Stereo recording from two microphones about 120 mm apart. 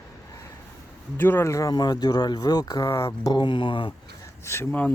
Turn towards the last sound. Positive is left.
turn(degrees=15)  # may be behind; listen again after turning